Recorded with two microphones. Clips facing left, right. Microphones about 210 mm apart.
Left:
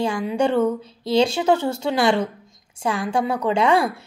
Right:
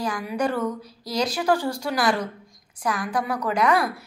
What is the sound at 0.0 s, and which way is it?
Speech, 25° left (ahead or behind).